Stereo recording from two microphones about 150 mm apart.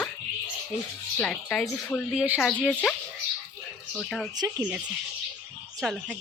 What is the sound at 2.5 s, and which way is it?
Speech, 10° left (ahead or behind).